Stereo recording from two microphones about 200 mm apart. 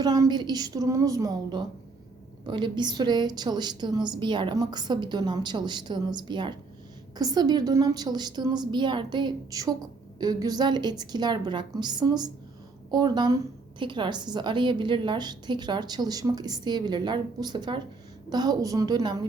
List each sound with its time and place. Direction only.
0.0 s a woman's voice: 20° right (ahead or behind)